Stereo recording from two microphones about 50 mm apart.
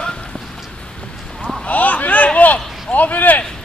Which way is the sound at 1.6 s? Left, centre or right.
Left.